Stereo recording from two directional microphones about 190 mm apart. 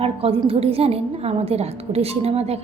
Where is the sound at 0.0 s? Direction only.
30° right (ahead or behind).